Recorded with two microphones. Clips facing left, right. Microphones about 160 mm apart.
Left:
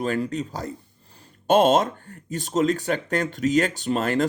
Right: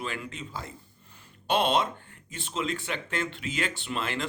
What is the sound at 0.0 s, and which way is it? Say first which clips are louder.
Speech: left 11 dB; 40° left (ahead or behind).